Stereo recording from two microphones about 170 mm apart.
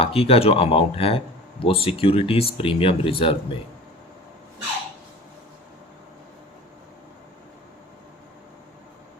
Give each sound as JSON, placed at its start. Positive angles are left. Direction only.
{"t": 0.0, "sound": "speech", "side_deg": 35}